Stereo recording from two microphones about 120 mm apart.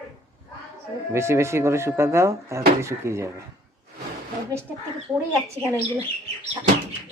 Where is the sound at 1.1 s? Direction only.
25° right (ahead or behind).